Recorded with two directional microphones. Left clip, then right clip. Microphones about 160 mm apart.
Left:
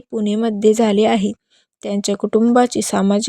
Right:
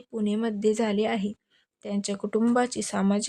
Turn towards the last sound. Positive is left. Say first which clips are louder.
# left 10 dB
turn(degrees=45)  # may be behind; listen again after turning